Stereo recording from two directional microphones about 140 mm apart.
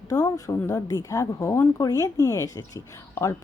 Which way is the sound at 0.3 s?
20° left (ahead or behind).